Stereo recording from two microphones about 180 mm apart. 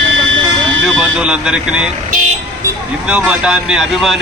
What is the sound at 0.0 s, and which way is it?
Vehicle, 90° right.